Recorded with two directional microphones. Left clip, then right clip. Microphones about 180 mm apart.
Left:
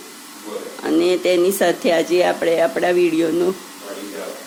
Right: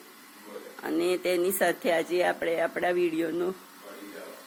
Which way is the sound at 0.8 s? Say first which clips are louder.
Left 10 dB; 5° left (ahead or behind).